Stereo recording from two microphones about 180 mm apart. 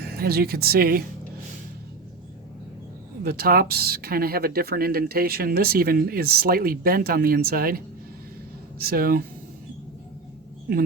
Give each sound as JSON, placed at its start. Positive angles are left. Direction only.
{"t": 0.2, "sound": "speech", "side_deg": -60}
{"t": 3.2, "sound": "speech", "side_deg": -55}
{"t": 8.8, "sound": "speech", "side_deg": -55}